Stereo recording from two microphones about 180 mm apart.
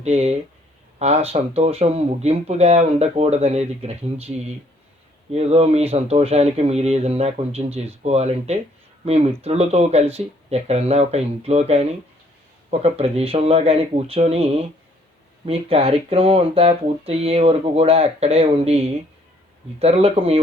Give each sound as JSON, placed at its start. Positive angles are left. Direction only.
{"t": 0.0, "sound": "speech", "side_deg": -35}
{"t": 5.3, "sound": "speech", "side_deg": -35}